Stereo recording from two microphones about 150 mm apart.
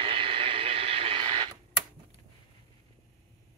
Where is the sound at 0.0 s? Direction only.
35° right (ahead or behind).